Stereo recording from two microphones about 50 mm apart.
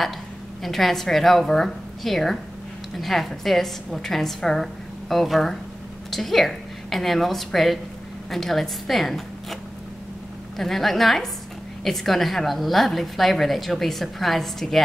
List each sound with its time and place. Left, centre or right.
0.6 s a woman's voice: centre
10.6 s a woman's voice: centre